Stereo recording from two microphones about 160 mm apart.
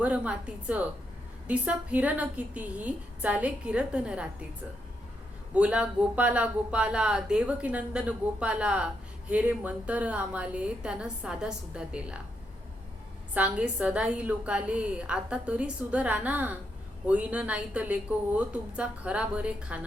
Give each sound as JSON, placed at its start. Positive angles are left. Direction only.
{"t": 0.0, "sound": "speech", "side_deg": -5}
{"t": 5.5, "sound": "speech", "side_deg": -5}
{"t": 13.3, "sound": "speech", "side_deg": -10}